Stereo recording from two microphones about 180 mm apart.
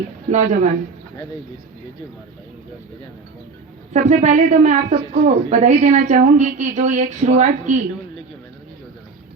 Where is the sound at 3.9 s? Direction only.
40° right (ahead or behind).